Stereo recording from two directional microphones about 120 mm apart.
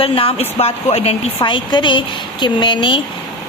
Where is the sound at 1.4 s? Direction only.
40° left (ahead or behind).